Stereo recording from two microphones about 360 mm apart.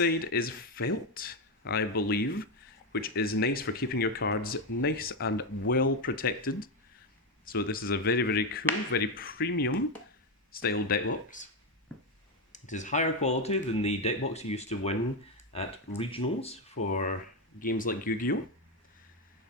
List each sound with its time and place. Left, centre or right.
0.0 s speech: left
12.5 s speech: centre